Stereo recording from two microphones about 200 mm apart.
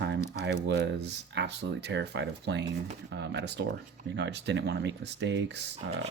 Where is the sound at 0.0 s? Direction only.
60° right (ahead or behind).